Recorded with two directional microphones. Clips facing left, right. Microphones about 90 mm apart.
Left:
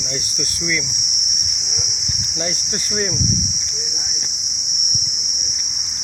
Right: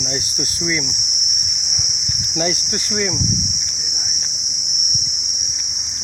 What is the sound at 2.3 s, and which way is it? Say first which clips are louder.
Insect: right 5 dB; 55° right (ahead or behind).